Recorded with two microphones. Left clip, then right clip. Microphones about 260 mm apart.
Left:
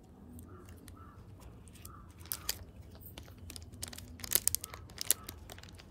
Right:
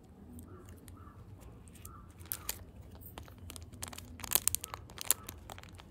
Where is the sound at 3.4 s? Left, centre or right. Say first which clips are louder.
Left 2 dB; right.